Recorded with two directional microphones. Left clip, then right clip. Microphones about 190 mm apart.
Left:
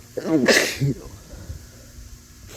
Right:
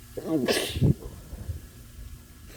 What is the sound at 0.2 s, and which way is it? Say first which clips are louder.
Sneeze: left 9 dB; 25° left (ahead or behind).